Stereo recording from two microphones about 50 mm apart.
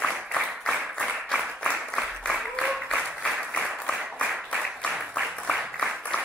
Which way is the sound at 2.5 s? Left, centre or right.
Centre.